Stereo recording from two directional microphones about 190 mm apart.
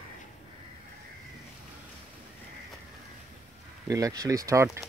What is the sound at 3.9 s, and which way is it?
Speech, 15° right (ahead or behind).